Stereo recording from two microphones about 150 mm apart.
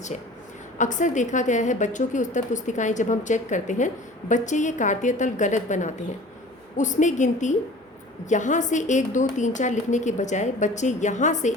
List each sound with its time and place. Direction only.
0.8 s a woman's voice: 55° left (ahead or behind)